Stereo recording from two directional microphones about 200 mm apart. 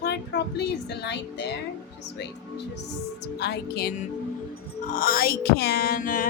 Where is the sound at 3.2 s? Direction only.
55° left (ahead or behind).